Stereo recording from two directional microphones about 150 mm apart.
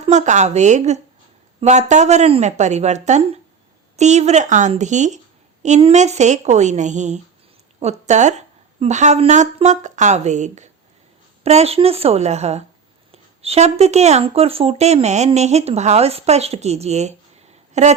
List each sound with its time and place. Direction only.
0.0 s speech: 50° right (ahead or behind)